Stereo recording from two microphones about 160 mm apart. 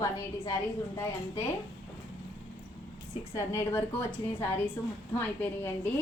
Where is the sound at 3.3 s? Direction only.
15° left (ahead or behind).